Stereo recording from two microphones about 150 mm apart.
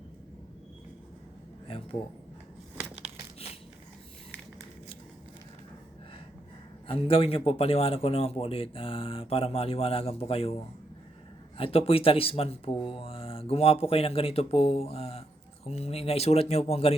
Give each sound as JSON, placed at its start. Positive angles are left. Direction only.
{"t": 1.6, "sound": "speech", "side_deg": 35}
{"t": 2.7, "sound": "crushing", "side_deg": -10}
{"t": 6.8, "sound": "a man's voice", "side_deg": 40}